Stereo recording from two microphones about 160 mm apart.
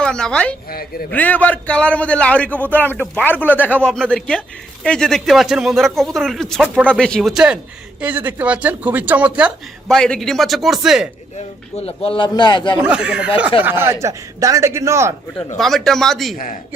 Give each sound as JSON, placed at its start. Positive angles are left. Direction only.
{"t": 0.0, "sound": "speech", "side_deg": 5}
{"t": 0.7, "sound": "speech", "side_deg": 70}
{"t": 1.1, "sound": "a man's voice", "side_deg": 10}
{"t": 9.9, "sound": "speech", "side_deg": 5}
{"t": 11.8, "sound": "speech", "side_deg": 40}
{"t": 12.7, "sound": "a man's voice", "side_deg": -5}
{"t": 15.5, "sound": "speech", "side_deg": 0}
{"t": 16.3, "sound": "a man's voice", "side_deg": 55}